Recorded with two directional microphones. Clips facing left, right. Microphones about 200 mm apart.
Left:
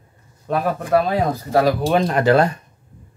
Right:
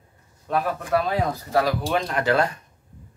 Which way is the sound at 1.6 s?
25° left (ahead or behind).